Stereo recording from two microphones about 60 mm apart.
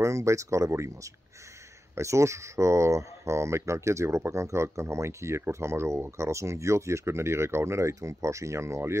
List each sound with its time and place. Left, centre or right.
0.0 s speech: right